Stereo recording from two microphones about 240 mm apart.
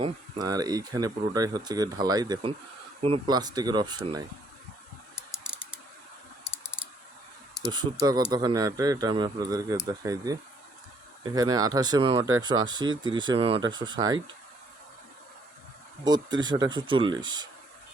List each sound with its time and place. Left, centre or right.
0.0 s speech: centre
7.6 s speech: centre
16.0 s speech: centre